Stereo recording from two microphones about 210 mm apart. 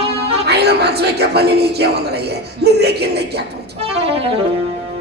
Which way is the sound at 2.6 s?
50° right (ahead or behind).